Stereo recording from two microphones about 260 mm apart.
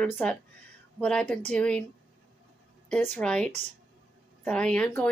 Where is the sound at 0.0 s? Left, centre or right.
Centre.